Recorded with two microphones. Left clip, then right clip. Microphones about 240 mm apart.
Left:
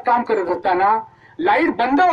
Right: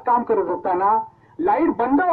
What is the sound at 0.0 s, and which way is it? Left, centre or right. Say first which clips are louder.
Speech: left 1 dB; left.